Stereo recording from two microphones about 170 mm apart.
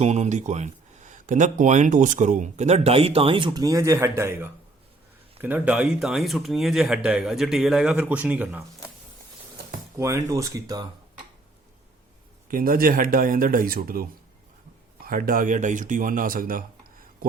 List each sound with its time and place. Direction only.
0.0 s speech: 40° right (ahead or behind); by 8.6 s 10° right (ahead or behind)
10.0 s speech: 20° right (ahead or behind)
12.5 s speech: 55° right (ahead or behind)